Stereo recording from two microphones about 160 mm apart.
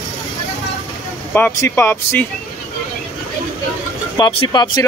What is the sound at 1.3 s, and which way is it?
Speech, 15° left (ahead or behind).